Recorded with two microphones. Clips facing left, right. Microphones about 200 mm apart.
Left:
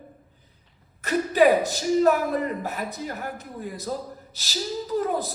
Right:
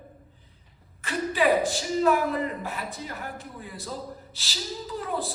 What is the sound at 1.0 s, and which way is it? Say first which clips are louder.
A woman's voice: left 5 dB; 40° left (ahead or behind).